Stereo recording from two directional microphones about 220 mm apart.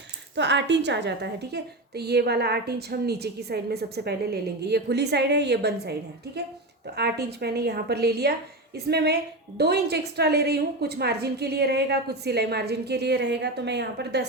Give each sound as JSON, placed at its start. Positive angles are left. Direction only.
{"t": 0.3, "sound": "a woman's voice", "side_deg": -55}